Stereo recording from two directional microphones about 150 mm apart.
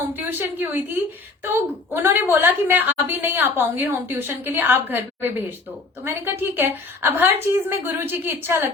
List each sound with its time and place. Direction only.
0.0 s a woman's voice: 15° right (ahead or behind)